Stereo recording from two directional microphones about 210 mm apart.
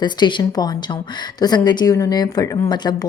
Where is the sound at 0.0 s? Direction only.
20° left (ahead or behind).